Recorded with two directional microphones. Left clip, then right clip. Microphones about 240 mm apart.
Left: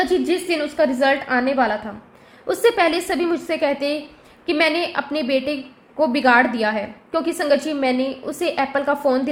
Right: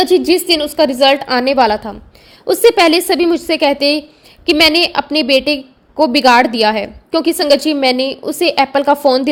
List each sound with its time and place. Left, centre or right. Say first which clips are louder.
0.1 s a woman's voice: right 8 dB; right